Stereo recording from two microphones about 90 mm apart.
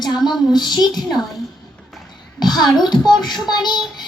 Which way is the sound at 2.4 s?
50° left (ahead or behind).